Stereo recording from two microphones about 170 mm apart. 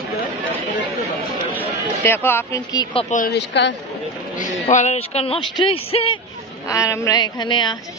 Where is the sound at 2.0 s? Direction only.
15° left (ahead or behind).